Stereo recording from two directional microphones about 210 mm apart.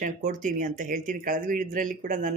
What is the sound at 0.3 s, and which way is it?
Speech, 40° right (ahead or behind).